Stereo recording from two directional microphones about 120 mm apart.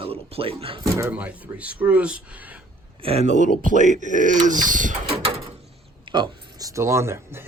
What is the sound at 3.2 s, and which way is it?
Speech, 90° right.